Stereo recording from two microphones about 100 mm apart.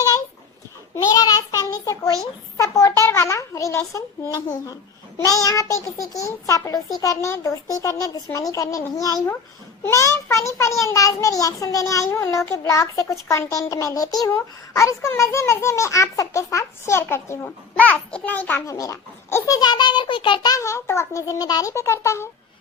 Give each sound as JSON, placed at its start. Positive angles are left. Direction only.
{"t": 0.9, "sound": "a child's voice", "side_deg": 40}
{"t": 9.8, "sound": "a child's voice", "side_deg": 30}
{"t": 17.7, "sound": "a child's voice", "side_deg": 15}
{"t": 18.6, "sound": "a child's voice", "side_deg": 35}
{"t": 20.5, "sound": "a child's voice", "side_deg": 30}